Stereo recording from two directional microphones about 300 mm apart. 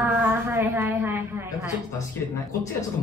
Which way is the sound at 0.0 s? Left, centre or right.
Centre.